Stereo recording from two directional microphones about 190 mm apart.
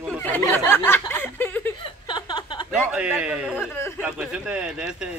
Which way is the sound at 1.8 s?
25° left (ahead or behind).